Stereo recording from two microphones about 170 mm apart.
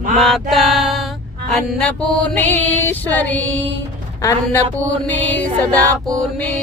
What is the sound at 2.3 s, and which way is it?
Music, 10° left (ahead or behind).